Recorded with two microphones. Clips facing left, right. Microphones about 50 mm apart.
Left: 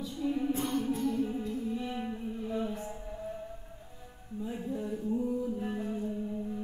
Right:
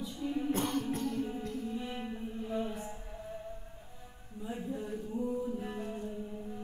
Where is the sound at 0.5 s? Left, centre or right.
Right.